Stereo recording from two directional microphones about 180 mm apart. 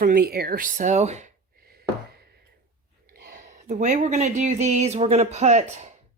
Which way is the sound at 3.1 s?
55° right (ahead or behind).